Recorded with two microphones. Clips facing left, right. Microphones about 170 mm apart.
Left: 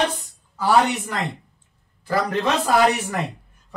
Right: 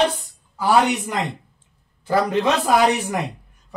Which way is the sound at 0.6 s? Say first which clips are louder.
Right 1 dB; 15° right (ahead or behind).